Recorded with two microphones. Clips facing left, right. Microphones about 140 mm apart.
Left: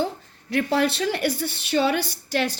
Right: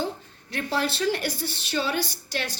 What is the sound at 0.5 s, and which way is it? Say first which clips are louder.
A woman's voice: left 6 dB; 60° left (ahead or behind).